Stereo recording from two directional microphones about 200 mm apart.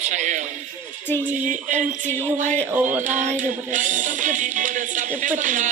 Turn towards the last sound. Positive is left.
turn(degrees=-40)  # may be behind; listen again after turning